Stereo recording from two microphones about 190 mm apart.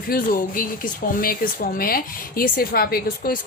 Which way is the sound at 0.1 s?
50° left (ahead or behind).